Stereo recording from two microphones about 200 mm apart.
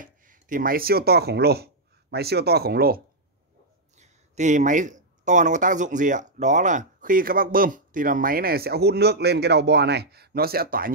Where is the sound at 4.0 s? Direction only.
35° right (ahead or behind).